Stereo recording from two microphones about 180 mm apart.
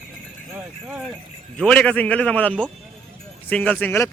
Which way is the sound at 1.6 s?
5° left (ahead or behind).